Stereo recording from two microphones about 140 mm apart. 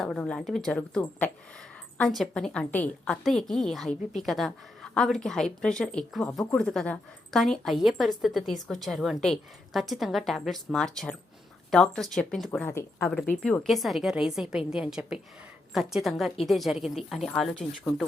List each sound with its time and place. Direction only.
0.0 s a woman's voice: 5° left (ahead or behind)
12.5 s a woman's voice: 15° left (ahead or behind)